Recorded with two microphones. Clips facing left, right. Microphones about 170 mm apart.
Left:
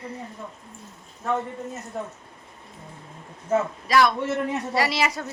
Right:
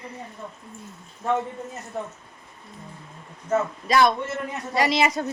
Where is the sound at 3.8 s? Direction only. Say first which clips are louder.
Right 1 dB; 25° right (ahead or behind).